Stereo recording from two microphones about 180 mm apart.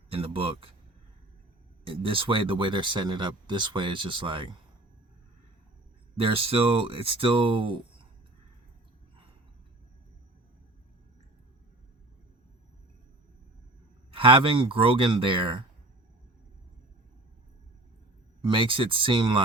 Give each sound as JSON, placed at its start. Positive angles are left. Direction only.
{"t": 0.1, "sound": "speech", "side_deg": -30}
{"t": 1.8, "sound": "speech", "side_deg": -30}
{"t": 6.1, "sound": "speech", "side_deg": -30}
{"t": 14.1, "sound": "speech", "side_deg": -30}
{"t": 18.4, "sound": "speech", "side_deg": -30}